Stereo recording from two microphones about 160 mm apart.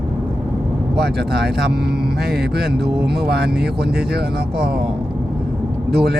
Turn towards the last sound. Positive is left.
turn(degrees=-85)